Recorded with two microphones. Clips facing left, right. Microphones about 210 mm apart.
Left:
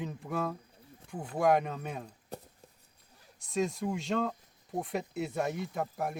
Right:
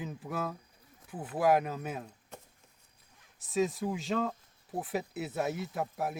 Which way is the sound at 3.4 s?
Centre (ahead or behind).